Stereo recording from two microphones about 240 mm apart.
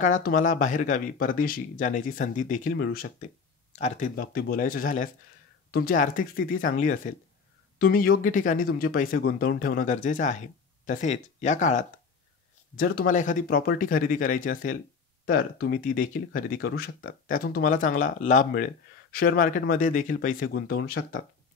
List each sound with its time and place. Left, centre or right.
0.0 s speech: left